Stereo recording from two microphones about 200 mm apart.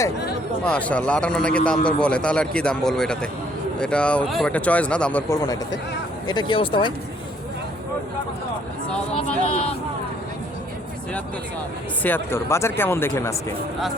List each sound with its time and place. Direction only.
0.6 s a man's voice: 5° left (ahead or behind)
6.2 s speech: 25° left (ahead or behind)
9.5 s speech: 30° left (ahead or behind)
12.0 s speech: 10° left (ahead or behind)